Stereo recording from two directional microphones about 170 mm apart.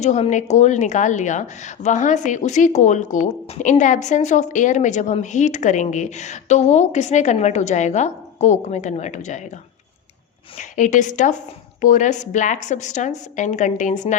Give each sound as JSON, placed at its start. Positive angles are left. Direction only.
{"t": 0.0, "sound": "a woman's voice", "side_deg": 45}
{"t": 10.6, "sound": "a woman's voice", "side_deg": 45}